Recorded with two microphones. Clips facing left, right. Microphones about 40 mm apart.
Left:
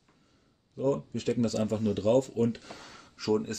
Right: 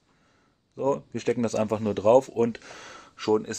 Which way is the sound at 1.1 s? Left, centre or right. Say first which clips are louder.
Right 3 dB; right.